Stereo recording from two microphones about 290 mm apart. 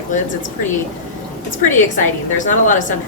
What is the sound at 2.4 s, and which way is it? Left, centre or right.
Speech, left.